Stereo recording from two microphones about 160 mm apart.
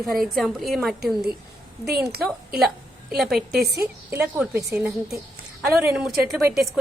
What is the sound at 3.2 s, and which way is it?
A woman's voice, centre (ahead or behind).